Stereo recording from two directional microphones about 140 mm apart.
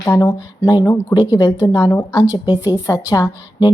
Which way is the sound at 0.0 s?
25° left (ahead or behind).